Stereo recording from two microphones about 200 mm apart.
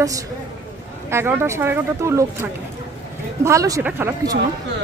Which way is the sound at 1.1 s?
10° right (ahead or behind).